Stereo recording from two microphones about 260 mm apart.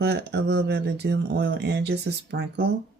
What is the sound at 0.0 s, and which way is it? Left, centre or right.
Speech, right.